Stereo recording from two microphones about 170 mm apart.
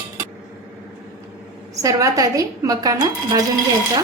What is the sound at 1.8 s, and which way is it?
A woman's voice, 20° right (ahead or behind).